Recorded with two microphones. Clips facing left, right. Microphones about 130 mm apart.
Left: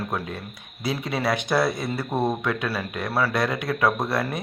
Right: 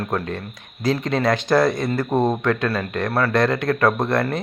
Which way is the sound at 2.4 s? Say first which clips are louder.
Right 5 dB; 10° left (ahead or behind).